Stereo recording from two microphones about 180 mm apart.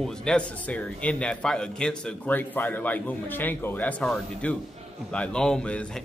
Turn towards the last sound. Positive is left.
turn(degrees=5)  # may be behind; listen again after turning